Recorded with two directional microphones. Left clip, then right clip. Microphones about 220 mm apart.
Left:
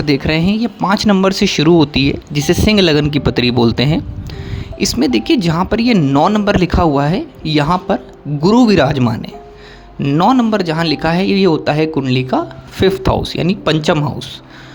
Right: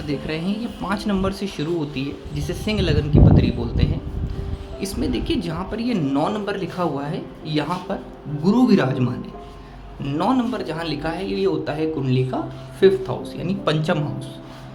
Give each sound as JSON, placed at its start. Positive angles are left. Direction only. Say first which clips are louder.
{"t": 0.1, "sound": "speech", "louder": "left 11 dB", "side_deg": 40}